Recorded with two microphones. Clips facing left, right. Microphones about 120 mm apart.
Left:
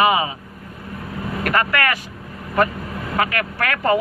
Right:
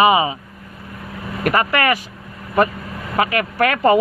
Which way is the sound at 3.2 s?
20° right (ahead or behind).